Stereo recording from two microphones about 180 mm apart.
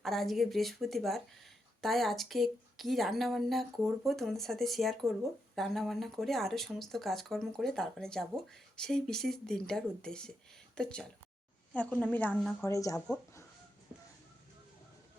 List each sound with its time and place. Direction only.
0.0 s a woman's voice: centre (ahead or behind)
12.6 s speech: 15° left (ahead or behind)